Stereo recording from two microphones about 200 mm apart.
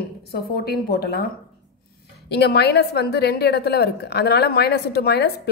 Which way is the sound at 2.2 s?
55° left (ahead or behind).